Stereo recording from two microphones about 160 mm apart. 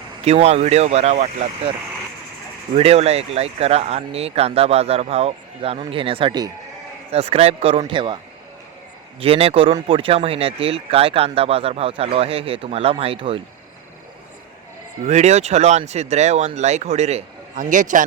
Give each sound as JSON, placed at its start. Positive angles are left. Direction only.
{"t": 0.3, "sound": "speech", "side_deg": -40}
{"t": 2.7, "sound": "speech", "side_deg": -40}
{"t": 7.1, "sound": "speech", "side_deg": -40}
{"t": 9.2, "sound": "speech", "side_deg": -35}
{"t": 15.0, "sound": "a man's voice", "side_deg": -45}